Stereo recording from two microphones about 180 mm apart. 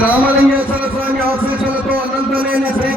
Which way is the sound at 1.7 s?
10° right (ahead or behind).